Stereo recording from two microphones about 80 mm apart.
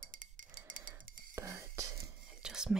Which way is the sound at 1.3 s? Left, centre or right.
Right.